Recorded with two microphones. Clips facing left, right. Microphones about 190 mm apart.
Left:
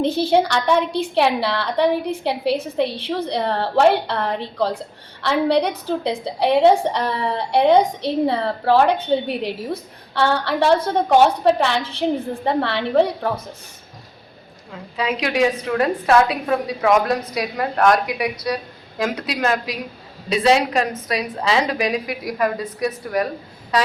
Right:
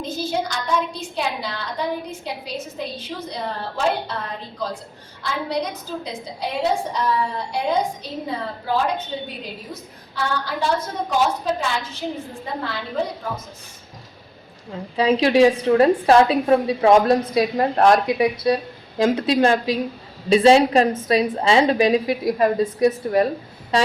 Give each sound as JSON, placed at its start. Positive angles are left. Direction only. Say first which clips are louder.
{"t": 0.0, "sound": "a woman's voice", "louder": "left 8 dB", "side_deg": 65}
{"t": 14.7, "sound": "a woman's voice", "louder": "right 5 dB", "side_deg": -30}